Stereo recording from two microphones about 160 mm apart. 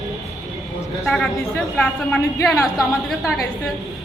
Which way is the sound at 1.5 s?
10° left (ahead or behind).